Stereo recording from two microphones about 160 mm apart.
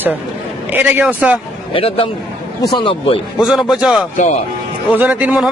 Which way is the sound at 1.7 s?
35° left (ahead or behind).